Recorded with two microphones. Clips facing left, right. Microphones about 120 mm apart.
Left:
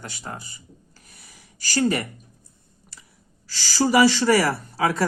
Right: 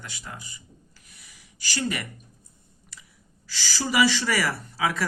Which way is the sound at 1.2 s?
40° left (ahead or behind).